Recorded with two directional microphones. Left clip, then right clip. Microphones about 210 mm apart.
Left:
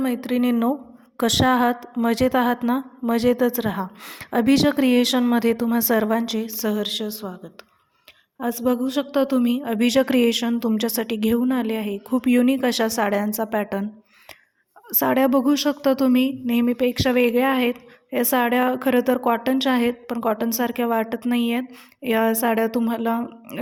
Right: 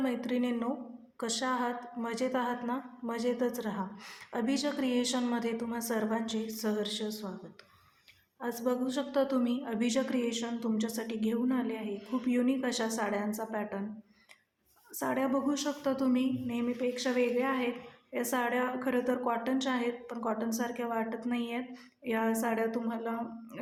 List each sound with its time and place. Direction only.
0.0 s a woman's voice: 35° left (ahead or behind)
8.4 s a woman's voice: 35° left (ahead or behind)
14.8 s a woman's voice: 45° left (ahead or behind)